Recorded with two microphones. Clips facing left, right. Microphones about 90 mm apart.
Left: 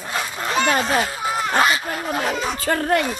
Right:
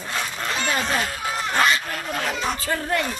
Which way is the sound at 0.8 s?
5° left (ahead or behind).